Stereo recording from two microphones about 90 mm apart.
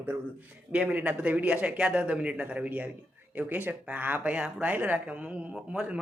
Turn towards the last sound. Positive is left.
turn(degrees=-15)  # may be behind; listen again after turning